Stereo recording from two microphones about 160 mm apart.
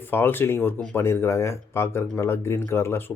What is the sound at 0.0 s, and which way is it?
Speech, 15° left (ahead or behind).